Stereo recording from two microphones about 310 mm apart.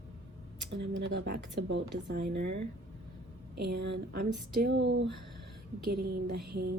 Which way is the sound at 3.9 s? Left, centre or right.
Right.